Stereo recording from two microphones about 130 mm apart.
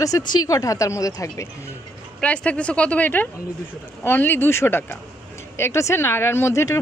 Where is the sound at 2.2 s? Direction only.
10° left (ahead or behind).